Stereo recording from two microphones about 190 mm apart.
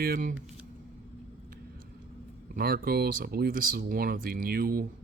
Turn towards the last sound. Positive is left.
turn(degrees=-50)  # may be behind; listen again after turning